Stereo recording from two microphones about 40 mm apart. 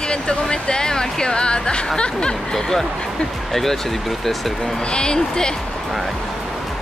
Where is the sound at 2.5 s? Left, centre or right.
Centre.